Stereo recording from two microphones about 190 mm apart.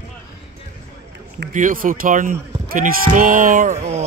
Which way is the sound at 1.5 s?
45° right (ahead or behind).